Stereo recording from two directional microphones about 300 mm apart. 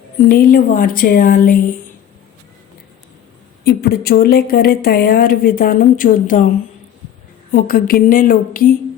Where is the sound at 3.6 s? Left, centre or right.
Left.